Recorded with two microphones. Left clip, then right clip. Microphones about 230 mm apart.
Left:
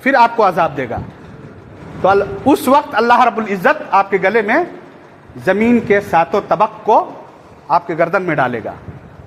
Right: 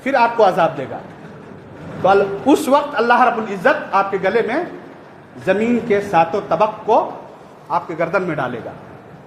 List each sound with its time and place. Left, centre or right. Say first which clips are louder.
0.0 s a man's voice: left 3 dB; left
2.0 s a man's voice: left 1 dB; left